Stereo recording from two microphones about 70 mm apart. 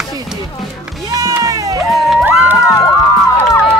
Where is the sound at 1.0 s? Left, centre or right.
Right.